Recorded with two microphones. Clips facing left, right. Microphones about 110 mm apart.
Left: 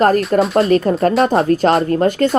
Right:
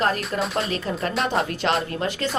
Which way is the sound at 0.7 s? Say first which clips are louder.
Left 13 dB; 45° left (ahead or behind).